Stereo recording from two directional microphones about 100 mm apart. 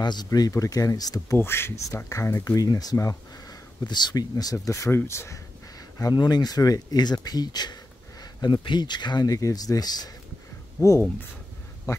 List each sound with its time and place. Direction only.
0.0 s speech: 45° left (ahead or behind)
1.4 s speech: 25° left (ahead or behind)
5.9 s speech: 40° left (ahead or behind)
10.8 s speech: 25° left (ahead or behind)